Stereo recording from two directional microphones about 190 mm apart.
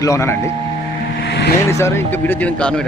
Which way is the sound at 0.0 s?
15° left (ahead or behind).